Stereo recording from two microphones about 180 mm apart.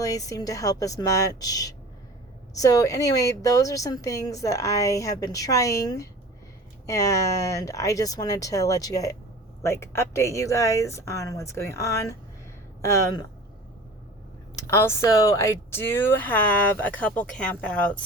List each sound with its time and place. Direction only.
0.0 s speech: 20° left (ahead or behind)
14.5 s speech: 15° left (ahead or behind)